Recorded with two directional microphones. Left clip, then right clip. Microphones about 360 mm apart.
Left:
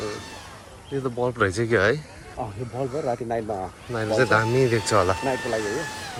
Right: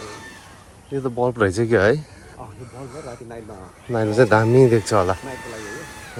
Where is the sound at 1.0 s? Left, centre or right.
Centre.